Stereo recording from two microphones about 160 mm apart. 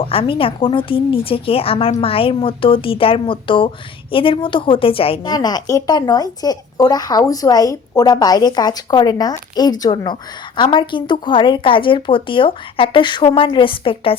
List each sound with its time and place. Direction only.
0.0 s a woman's voice: 35° left (ahead or behind)